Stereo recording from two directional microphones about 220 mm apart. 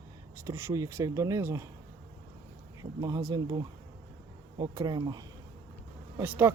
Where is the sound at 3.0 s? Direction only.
15° right (ahead or behind).